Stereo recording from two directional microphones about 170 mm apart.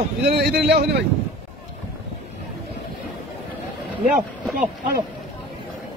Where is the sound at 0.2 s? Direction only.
70° right (ahead or behind).